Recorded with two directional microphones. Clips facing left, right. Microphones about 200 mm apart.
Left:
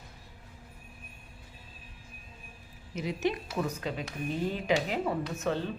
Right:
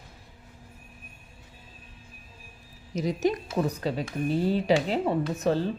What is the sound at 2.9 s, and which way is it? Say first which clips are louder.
A woman's voice: right 5 dB; 40° right (ahead or behind).